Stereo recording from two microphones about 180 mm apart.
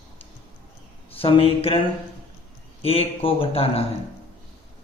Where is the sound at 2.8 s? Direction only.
35° left (ahead or behind).